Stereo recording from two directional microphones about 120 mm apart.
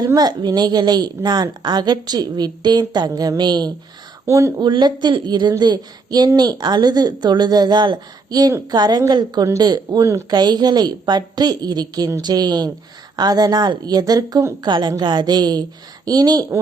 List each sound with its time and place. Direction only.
0.0 s a woman's voice: 35° right (ahead or behind)
4.3 s speech: 25° right (ahead or behind)
4.6 s a woman's voice: 40° right (ahead or behind)